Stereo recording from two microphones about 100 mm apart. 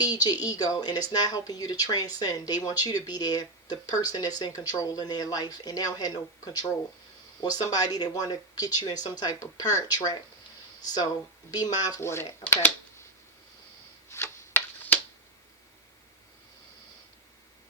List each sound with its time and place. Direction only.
0.0 s speech: 40° left (ahead or behind)
11.5 s speech: 40° left (ahead or behind)
11.9 s speech: 25° left (ahead or behind)
14.1 s tick-tock: 25° left (ahead or behind)